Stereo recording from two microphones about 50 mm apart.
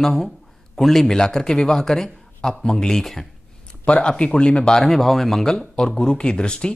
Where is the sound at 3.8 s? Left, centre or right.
Left.